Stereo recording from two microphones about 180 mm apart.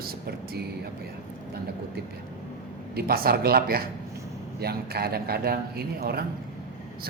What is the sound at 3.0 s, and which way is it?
Speech, 55° right (ahead or behind).